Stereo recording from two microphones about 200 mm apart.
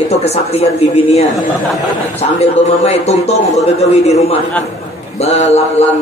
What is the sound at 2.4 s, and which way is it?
A woman's voice, 30° left (ahead or behind).